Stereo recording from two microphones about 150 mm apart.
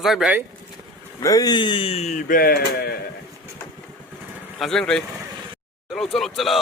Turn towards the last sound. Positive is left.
turn(degrees=0)  # may be behind; listen again after turning